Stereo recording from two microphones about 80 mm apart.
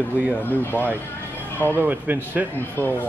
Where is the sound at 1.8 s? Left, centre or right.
Right.